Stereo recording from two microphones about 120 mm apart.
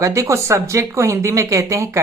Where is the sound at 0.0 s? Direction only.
25° right (ahead or behind).